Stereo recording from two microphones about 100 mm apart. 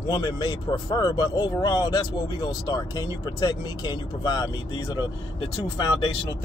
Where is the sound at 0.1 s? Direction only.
45° left (ahead or behind).